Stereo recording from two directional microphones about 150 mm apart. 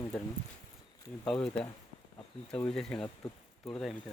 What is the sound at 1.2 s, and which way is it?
Speech, 5° left (ahead or behind).